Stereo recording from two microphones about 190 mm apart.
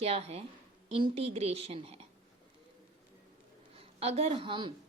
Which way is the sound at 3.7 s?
30° right (ahead or behind).